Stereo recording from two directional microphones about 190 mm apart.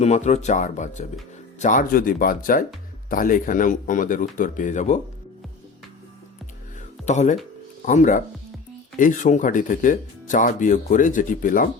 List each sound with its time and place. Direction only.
0.0 s speech: 35° left (ahead or behind)
7.0 s speech: 40° left (ahead or behind)